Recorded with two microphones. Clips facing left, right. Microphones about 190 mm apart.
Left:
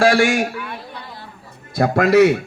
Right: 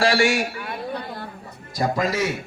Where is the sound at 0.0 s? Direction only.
50° left (ahead or behind).